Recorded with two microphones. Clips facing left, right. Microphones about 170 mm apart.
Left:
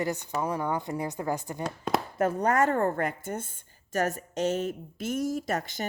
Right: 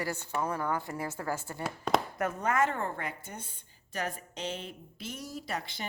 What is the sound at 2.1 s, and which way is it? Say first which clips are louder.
A woman's voice: left 5 dB; 30° left (ahead or behind).